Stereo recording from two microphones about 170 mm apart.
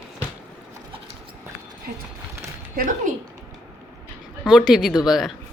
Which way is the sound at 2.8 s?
50° right (ahead or behind).